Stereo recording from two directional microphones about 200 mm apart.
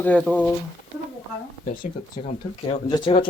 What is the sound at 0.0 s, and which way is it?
Speech, 5° left (ahead or behind).